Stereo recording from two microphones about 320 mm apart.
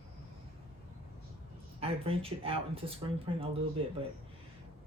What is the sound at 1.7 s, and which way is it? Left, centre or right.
Speech, centre.